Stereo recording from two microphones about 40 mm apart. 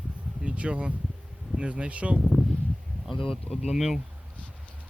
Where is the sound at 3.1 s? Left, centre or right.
Centre.